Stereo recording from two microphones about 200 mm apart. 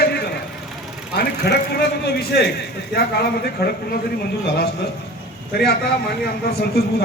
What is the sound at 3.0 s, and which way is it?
Speech, 50° left (ahead or behind).